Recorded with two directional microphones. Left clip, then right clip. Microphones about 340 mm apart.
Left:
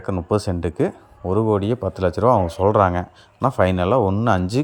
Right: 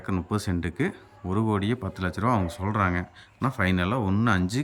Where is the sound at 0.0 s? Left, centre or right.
Centre.